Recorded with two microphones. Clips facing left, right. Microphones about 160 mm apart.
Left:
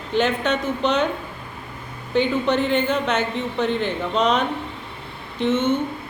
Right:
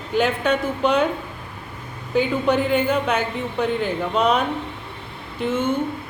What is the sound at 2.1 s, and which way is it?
A woman's voice, 5° right (ahead or behind).